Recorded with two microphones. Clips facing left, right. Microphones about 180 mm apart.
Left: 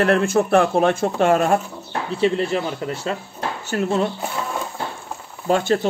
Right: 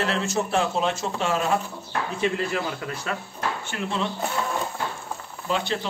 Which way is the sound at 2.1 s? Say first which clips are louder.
Left 7 dB; 30° left (ahead or behind).